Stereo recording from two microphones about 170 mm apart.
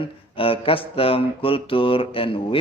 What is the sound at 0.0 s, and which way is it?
A man's voice, 35° left (ahead or behind).